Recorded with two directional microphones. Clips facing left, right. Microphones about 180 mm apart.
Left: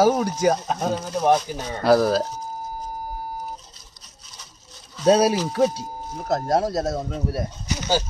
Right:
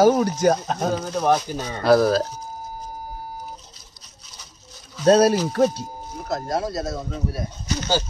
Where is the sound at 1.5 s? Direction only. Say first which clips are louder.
Right 1 dB; 15° left (ahead or behind).